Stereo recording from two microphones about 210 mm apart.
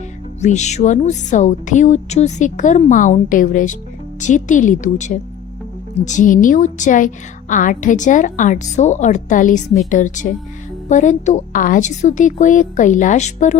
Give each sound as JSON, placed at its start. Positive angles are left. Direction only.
{"t": 0.4, "sound": "a woman's voice", "side_deg": 35}